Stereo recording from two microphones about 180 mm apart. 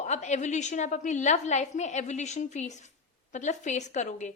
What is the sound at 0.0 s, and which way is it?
A woman's voice, 40° left (ahead or behind).